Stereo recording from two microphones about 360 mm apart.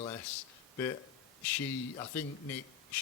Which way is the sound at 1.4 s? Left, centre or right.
Centre.